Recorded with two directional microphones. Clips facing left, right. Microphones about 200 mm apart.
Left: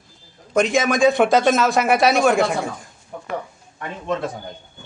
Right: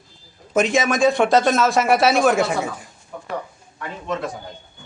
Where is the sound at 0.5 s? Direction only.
Centre (ahead or behind).